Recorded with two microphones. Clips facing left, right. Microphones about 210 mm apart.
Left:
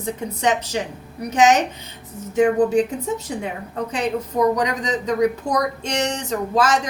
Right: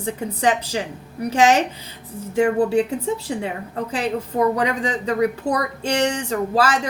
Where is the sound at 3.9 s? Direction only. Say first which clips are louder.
Even; 30° right (ahead or behind).